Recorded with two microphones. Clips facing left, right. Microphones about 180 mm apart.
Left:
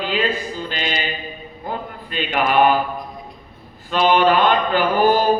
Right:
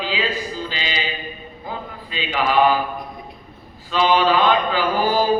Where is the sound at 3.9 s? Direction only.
55° left (ahead or behind).